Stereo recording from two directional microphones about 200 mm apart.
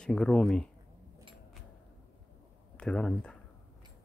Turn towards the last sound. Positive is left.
turn(degrees=5)  # may be behind; listen again after turning